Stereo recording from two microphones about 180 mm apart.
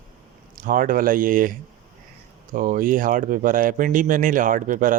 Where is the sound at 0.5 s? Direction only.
50° right (ahead or behind).